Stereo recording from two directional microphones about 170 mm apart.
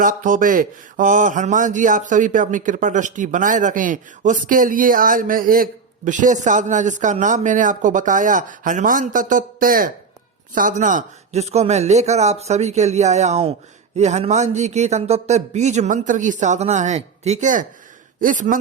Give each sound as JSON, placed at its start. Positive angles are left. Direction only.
{"t": 0.0, "sound": "a man's voice", "side_deg": -50}